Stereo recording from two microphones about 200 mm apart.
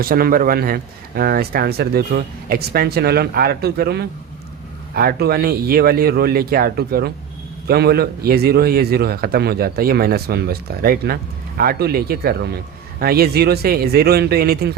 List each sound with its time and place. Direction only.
0.0 s a man's voice: 45° right (ahead or behind)